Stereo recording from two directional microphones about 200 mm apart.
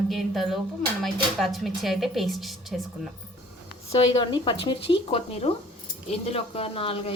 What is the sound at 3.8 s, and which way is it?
Speech, 30° left (ahead or behind).